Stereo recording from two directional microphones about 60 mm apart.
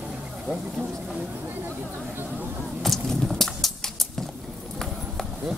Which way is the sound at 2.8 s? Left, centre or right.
Centre.